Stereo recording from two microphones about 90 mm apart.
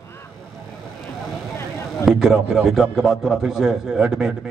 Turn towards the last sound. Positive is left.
turn(degrees=-5)  # may be behind; listen again after turning